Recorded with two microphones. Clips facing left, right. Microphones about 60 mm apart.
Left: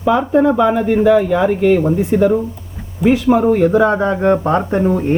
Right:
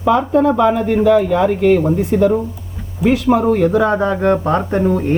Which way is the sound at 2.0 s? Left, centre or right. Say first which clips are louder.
Left 1 dB; left.